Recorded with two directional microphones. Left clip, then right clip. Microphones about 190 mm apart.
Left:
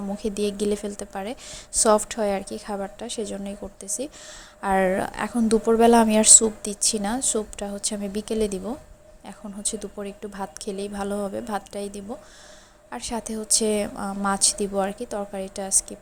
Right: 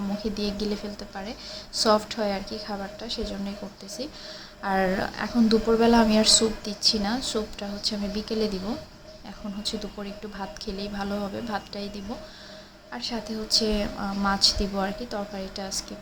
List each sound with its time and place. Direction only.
0.2 s a woman's voice: 45° left (ahead or behind)